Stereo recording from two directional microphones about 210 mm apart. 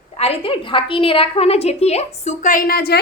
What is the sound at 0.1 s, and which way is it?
A woman's voice, 30° left (ahead or behind).